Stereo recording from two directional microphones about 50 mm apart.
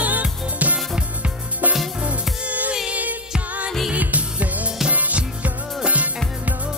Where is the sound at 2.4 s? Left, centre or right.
Right.